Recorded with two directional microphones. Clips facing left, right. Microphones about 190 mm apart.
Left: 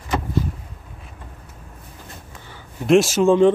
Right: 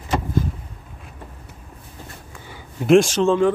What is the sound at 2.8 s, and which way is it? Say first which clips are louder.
Speech: even; 5° left (ahead or behind).